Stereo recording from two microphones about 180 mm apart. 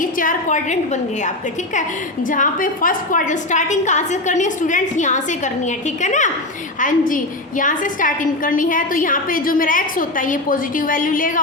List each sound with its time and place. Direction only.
0.0 s a woman's voice: 50° left (ahead or behind)
2.2 s a woman's voice: 45° left (ahead or behind)